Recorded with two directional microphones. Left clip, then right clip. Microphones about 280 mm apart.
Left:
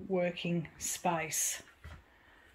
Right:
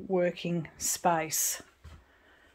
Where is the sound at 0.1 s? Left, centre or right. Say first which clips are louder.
Right 4 dB; centre.